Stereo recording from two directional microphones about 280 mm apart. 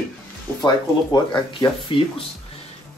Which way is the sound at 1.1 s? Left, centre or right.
Centre.